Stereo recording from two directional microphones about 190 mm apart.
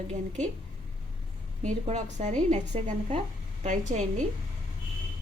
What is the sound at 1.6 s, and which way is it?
Speech, 40° right (ahead or behind).